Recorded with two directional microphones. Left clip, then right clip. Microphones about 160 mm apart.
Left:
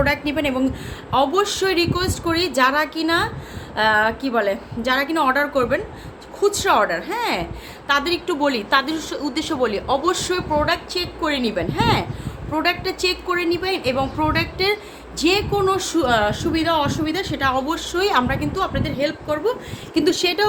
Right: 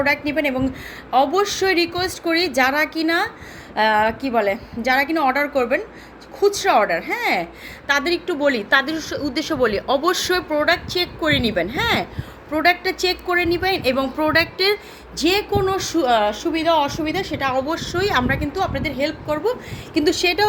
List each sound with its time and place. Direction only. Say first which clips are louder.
0.0 s a woman's voice: right 1 dB; 10° right (ahead or behind)